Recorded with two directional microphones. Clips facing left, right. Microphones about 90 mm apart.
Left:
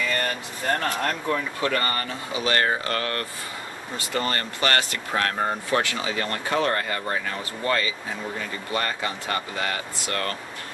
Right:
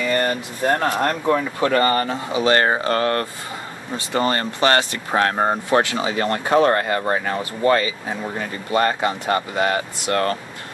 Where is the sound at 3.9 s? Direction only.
25° right (ahead or behind).